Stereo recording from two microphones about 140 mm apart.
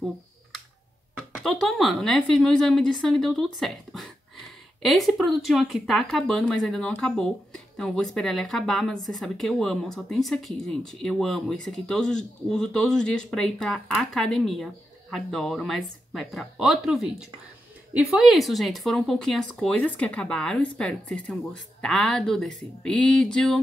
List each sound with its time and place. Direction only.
1.1 s speech: centre (ahead or behind)